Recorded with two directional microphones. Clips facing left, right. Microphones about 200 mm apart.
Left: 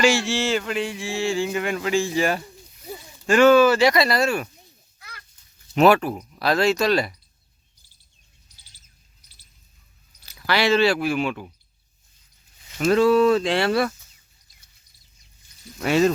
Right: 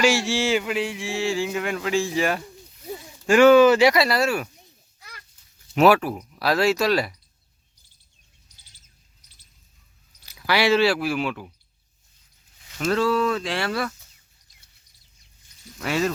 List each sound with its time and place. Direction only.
0.0 s speech: 5° right (ahead or behind)
3.2 s speech: 10° right (ahead or behind)
5.7 s speech: 5° right (ahead or behind)
10.2 s speech: 10° right (ahead or behind)
12.8 s speech: 15° left (ahead or behind)
15.8 s speech: 25° left (ahead or behind)